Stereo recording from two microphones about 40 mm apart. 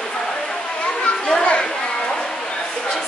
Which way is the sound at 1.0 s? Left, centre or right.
Left.